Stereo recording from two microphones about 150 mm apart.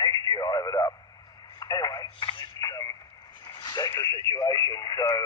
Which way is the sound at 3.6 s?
25° left (ahead or behind).